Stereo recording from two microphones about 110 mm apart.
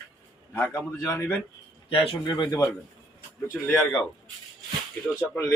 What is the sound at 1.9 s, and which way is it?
Speech, 50° left (ahead or behind).